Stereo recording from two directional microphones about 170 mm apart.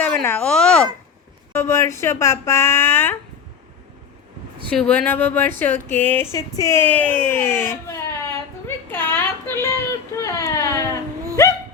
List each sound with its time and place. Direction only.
0.0 s speech: 10° left (ahead or behind)
1.5 s speech: 15° left (ahead or behind)
4.7 s speech: 5° left (ahead or behind)
6.3 s a sound: 20° left (ahead or behind)
11.4 s dog: 15° left (ahead or behind)